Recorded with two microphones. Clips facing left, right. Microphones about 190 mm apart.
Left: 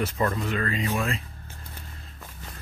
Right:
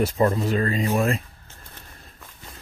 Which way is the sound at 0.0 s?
30° right (ahead or behind).